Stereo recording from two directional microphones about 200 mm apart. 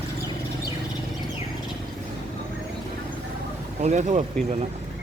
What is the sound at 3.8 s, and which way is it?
Speech, 35° right (ahead or behind).